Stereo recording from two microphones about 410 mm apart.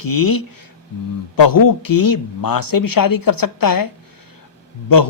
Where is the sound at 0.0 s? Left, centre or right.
Left.